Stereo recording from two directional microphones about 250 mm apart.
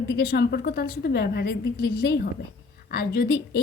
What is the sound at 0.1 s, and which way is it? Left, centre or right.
A woman's voice, left.